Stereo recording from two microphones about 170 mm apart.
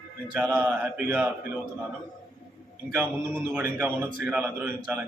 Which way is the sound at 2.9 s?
10° right (ahead or behind).